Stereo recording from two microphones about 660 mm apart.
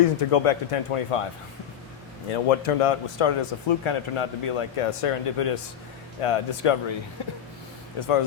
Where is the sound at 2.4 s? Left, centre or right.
Left.